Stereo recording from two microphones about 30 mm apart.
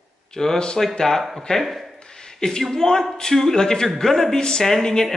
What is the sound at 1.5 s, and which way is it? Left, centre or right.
Speech, left.